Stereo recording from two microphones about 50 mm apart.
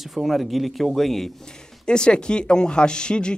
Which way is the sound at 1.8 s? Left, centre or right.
Centre.